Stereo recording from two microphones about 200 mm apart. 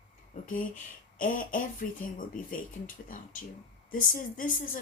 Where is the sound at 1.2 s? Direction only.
45° left (ahead or behind).